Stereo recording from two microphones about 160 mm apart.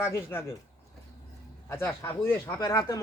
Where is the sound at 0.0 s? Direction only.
15° left (ahead or behind).